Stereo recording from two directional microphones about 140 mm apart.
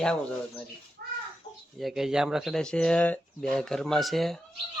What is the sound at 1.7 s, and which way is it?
Speech, centre (ahead or behind).